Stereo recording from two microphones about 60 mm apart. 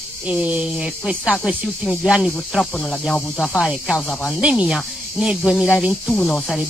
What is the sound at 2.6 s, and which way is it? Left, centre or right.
Speech, centre.